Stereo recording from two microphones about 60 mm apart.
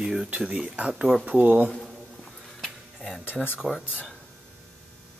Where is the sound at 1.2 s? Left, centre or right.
Right.